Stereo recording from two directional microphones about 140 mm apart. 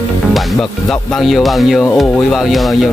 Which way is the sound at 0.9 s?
Centre (ahead or behind).